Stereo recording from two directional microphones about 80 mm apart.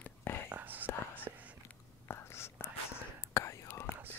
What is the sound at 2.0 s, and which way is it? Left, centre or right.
Whispering, left.